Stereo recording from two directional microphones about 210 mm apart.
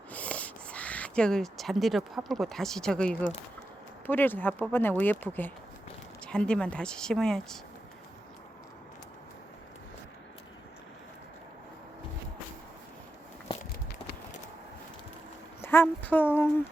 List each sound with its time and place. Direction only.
0.1 s speech: 5° left (ahead or behind)
6.2 s speech: 5° left (ahead or behind)
15.6 s speech: 10° left (ahead or behind)